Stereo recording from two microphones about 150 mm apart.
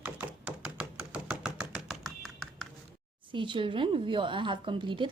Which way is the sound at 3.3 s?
35° right (ahead or behind).